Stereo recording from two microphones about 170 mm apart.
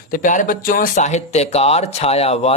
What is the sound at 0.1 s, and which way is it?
Speech, 50° left (ahead or behind).